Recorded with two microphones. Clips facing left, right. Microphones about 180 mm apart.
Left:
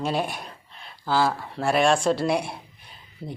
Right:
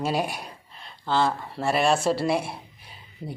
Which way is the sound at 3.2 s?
10° left (ahead or behind).